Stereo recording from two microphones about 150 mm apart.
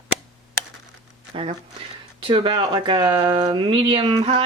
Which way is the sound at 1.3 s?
35° right (ahead or behind).